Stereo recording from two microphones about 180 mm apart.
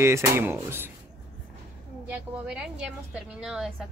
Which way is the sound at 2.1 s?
5° right (ahead or behind).